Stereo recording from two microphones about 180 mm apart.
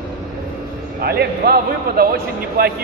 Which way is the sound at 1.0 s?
60° right (ahead or behind).